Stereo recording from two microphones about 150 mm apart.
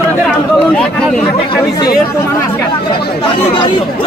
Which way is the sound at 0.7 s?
5° left (ahead or behind).